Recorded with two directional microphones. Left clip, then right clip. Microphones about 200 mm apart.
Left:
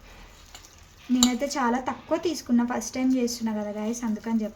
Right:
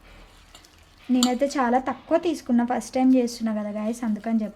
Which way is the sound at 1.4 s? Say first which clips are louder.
Right 4 dB; 45° right (ahead or behind).